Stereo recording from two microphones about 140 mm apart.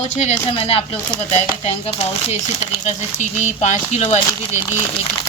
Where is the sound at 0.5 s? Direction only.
45° left (ahead or behind).